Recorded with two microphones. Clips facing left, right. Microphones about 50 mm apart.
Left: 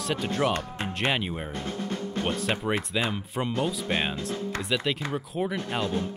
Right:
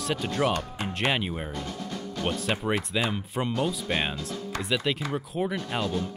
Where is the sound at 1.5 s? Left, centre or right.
Left.